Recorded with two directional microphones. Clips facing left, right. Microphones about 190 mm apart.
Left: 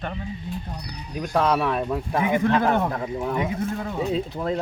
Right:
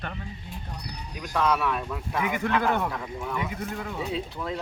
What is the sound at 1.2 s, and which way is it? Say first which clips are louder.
Speech: left 4 dB; 35° left (ahead or behind).